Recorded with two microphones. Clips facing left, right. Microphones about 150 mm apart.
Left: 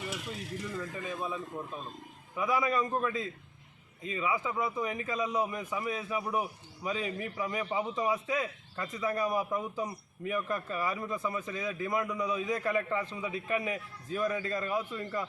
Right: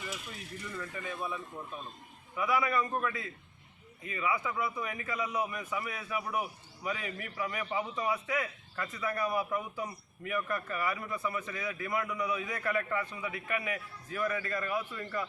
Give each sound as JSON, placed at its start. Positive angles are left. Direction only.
{"t": 0.9, "sound": "a man's voice", "side_deg": 20}